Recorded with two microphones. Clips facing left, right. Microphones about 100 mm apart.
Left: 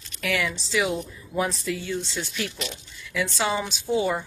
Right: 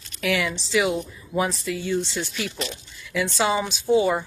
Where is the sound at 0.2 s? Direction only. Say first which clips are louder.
Right 3 dB; 5° right (ahead or behind).